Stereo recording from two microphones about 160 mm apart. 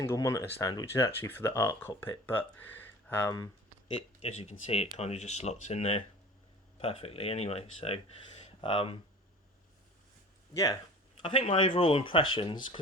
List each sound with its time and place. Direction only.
0.0 s speech: 20° left (ahead or behind)
3.3 s a sound: 25° left (ahead or behind)
4.2 s speech: 45° left (ahead or behind)
10.5 s speech: 20° left (ahead or behind)
11.2 s speech: 35° left (ahead or behind)